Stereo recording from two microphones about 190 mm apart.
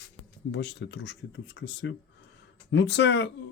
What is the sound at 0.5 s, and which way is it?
A man's voice, 65° left (ahead or behind).